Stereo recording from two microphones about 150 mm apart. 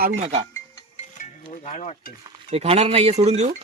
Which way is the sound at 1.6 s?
50° left (ahead or behind).